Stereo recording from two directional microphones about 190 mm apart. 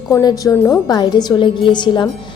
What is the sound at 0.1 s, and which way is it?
A woman's voice, 20° left (ahead or behind).